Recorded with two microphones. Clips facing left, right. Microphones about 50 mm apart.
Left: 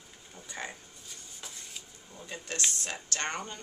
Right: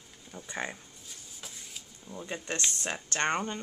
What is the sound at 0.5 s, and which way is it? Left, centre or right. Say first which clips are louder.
Speech: right 4 dB; right.